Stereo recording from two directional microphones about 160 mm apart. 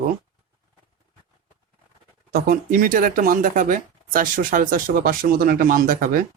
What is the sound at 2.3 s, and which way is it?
Speech, 60° right (ahead or behind).